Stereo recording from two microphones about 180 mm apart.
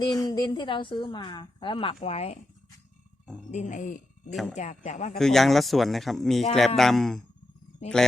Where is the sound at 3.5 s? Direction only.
45° left (ahead or behind).